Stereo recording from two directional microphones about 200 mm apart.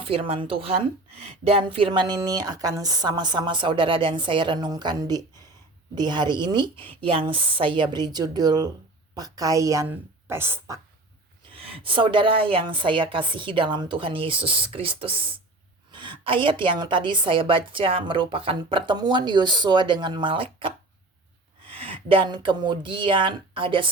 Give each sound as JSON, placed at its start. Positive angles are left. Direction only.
{"t": 0.0, "sound": "a woman's voice", "side_deg": -30}
{"t": 11.5, "sound": "a woman's voice", "side_deg": -25}